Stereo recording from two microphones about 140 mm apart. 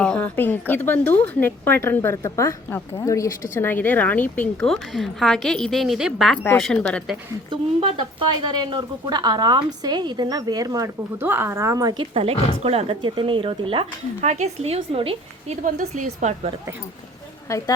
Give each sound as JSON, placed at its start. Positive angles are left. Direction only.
{"t": 0.0, "sound": "speech", "side_deg": 10}
{"t": 7.5, "sound": "speech", "side_deg": -35}
{"t": 12.1, "sound": "speech", "side_deg": -45}
{"t": 14.2, "sound": "speech", "side_deg": -55}
{"t": 15.6, "sound": "a woman's voice", "side_deg": -60}